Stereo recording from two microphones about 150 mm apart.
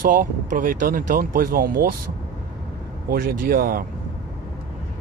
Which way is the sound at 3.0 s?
75° right (ahead or behind).